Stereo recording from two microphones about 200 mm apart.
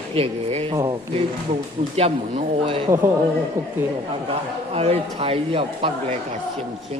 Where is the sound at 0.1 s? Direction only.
30° right (ahead or behind).